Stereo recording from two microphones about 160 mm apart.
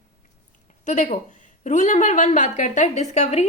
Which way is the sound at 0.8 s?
50° left (ahead or behind).